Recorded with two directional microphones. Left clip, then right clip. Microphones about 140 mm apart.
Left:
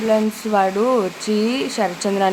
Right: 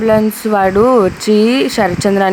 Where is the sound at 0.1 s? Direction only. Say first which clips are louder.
Right 4 dB; 40° right (ahead or behind).